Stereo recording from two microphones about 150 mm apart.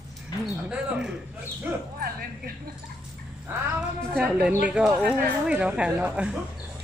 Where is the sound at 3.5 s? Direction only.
15° right (ahead or behind).